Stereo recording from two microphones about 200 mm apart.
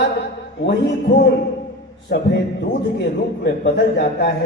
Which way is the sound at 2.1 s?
55° left (ahead or behind).